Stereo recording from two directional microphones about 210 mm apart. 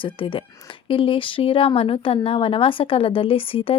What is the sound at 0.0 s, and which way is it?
A woman's voice, 25° left (ahead or behind).